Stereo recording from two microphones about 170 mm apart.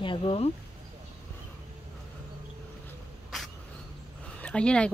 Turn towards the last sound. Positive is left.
turn(degrees=5)  # may be behind; listen again after turning